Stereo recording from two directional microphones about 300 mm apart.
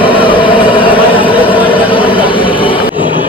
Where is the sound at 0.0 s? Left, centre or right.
Centre.